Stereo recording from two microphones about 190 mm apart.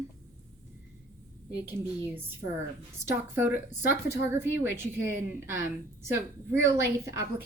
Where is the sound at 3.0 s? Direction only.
10° right (ahead or behind).